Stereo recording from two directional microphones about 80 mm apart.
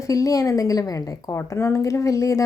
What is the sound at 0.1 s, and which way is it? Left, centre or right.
Speech, left.